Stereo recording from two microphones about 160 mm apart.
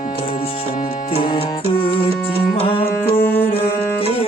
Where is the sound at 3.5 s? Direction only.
35° left (ahead or behind).